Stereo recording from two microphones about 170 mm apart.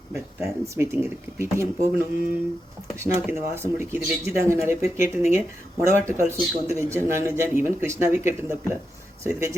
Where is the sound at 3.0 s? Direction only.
15° right (ahead or behind).